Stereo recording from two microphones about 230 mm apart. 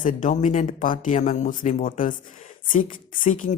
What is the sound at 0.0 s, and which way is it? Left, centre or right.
Speech, left.